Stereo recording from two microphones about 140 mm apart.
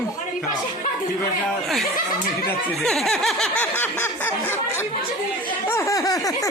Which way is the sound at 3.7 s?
15° left (ahead or behind).